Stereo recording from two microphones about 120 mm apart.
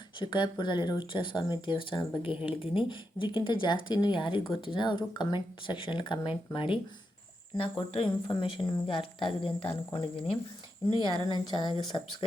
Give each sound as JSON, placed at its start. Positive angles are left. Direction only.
{"t": 0.2, "sound": "speech", "side_deg": 40}
{"t": 10.8, "sound": "speech", "side_deg": 40}